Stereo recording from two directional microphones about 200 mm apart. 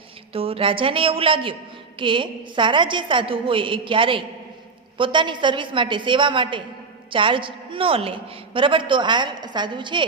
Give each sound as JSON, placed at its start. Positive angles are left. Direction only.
{"t": 0.3, "sound": "a woman's voice", "side_deg": -30}